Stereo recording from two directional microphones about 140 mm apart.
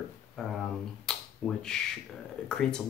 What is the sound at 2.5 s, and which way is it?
Speech, 5° left (ahead or behind).